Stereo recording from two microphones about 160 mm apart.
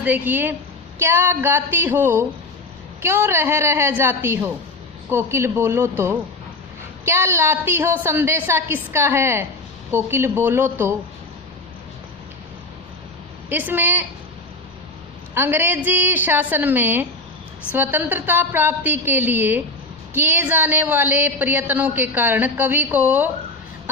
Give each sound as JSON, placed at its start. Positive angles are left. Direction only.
{"t": 0.0, "sound": "a woman's voice", "side_deg": -10}
{"t": 13.5, "sound": "a woman's voice", "side_deg": -10}
{"t": 15.4, "sound": "a woman's voice", "side_deg": -15}